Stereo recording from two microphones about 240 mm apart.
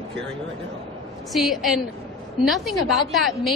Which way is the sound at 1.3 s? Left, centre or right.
Centre.